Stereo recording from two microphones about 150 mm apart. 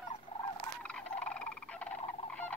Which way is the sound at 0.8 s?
5° left (ahead or behind).